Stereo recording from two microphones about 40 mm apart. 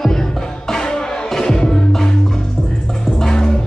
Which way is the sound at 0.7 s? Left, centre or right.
Centre.